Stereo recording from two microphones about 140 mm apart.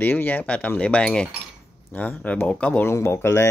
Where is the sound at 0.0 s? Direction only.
10° left (ahead or behind).